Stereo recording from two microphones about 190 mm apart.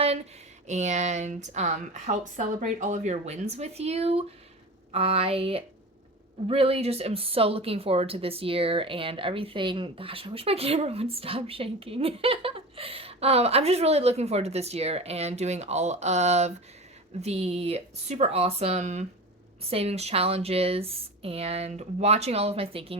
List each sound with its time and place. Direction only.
0.7 s speech: 40° right (ahead or behind)